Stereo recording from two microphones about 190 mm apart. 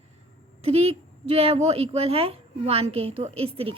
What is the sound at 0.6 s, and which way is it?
A woman's voice, 30° right (ahead or behind).